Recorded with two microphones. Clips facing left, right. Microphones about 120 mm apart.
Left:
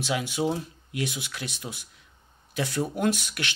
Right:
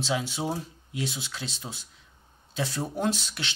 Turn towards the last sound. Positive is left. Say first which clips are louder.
# left 2 dB
turn(degrees=-25)  # may be behind; listen again after turning